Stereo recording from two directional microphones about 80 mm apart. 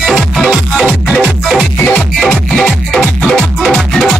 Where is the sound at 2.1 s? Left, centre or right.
Centre.